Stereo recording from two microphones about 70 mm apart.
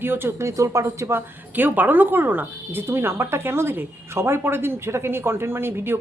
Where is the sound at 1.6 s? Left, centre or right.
Right.